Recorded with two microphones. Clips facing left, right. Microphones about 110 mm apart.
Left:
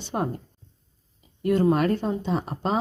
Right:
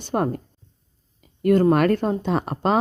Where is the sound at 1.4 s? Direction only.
55° right (ahead or behind); by 2.8 s 75° right (ahead or behind).